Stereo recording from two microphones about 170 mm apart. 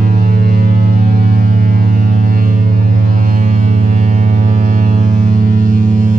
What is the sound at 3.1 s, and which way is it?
Ship, 55° right (ahead or behind).